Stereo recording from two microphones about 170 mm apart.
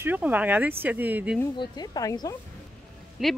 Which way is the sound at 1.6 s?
25° left (ahead or behind).